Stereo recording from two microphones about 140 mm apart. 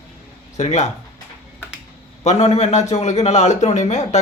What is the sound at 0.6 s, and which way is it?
Speech, 55° left (ahead or behind).